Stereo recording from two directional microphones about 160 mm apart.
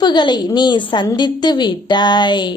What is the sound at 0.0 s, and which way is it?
A woman's voice, 30° left (ahead or behind).